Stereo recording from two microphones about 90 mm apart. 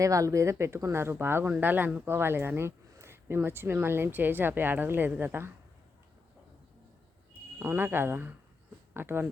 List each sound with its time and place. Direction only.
0.0 s speech: 35° right (ahead or behind)
7.6 s speech: 25° right (ahead or behind)